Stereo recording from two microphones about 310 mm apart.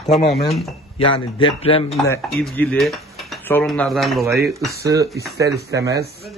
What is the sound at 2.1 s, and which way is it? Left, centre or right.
Speech, centre.